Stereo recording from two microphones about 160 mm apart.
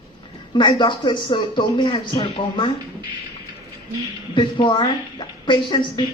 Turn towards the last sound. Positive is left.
turn(degrees=30)  # may be behind; listen again after turning